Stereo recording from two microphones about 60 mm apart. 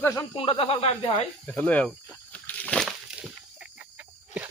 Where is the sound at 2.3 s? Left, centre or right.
Left.